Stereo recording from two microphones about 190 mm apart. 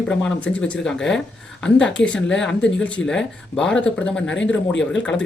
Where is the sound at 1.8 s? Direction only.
75° left (ahead or behind).